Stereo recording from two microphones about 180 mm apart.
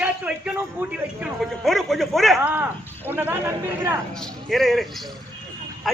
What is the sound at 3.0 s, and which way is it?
Speech, 10° right (ahead or behind).